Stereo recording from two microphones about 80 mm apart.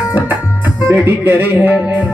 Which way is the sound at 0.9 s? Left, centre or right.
Right.